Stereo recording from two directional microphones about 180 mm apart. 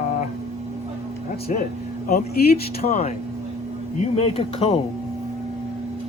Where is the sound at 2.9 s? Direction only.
40° left (ahead or behind).